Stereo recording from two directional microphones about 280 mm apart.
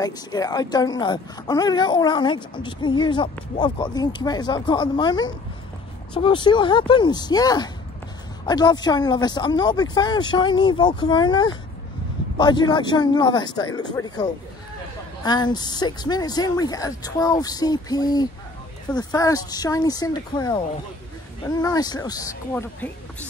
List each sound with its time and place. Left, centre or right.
0.0 s speech: centre